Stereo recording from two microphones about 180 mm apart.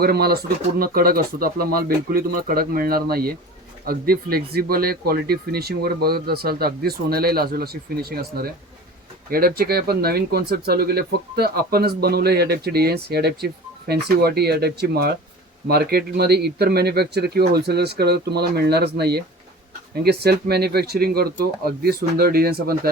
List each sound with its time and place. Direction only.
0.0 s speech: 60° right (ahead or behind)